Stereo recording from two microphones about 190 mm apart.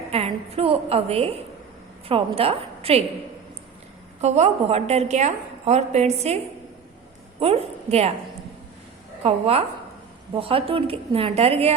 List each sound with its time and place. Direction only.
0.1 s a woman's voice: 30° right (ahead or behind)
4.2 s a woman's voice: 35° right (ahead or behind)
9.2 s a woman's voice: 30° right (ahead or behind)